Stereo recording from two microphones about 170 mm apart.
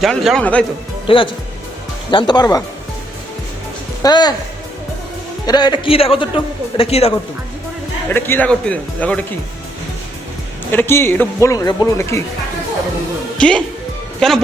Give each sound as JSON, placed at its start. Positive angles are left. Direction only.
{"t": 0.0, "sound": "speech", "side_deg": 0}
{"t": 1.0, "sound": "speech", "side_deg": 30}
{"t": 4.0, "sound": "speech", "side_deg": 25}
{"t": 5.5, "sound": "speech", "side_deg": 25}
{"t": 8.1, "sound": "speech", "side_deg": 10}
{"t": 10.7, "sound": "speech", "side_deg": 15}
{"t": 14.2, "sound": "speech", "side_deg": 5}